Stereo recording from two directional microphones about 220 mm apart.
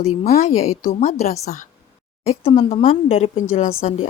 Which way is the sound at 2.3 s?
25° left (ahead or behind).